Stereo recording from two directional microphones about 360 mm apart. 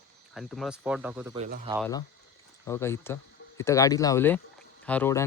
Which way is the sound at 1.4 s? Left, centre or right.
Centre.